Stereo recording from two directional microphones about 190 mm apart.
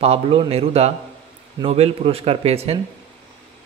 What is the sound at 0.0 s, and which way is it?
Speech, 30° right (ahead or behind).